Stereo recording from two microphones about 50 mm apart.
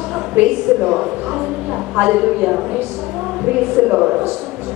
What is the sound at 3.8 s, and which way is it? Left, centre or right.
Speech, centre.